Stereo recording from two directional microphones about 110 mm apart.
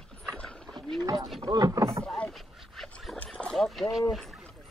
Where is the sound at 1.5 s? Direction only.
35° right (ahead or behind).